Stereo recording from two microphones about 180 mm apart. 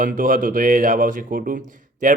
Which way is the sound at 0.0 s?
50° right (ahead or behind).